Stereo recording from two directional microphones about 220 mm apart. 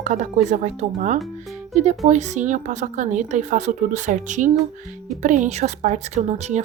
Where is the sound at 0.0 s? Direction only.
35° right (ahead or behind).